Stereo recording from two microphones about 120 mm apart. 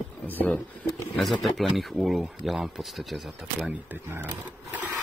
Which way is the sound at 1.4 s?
Centre (ahead or behind).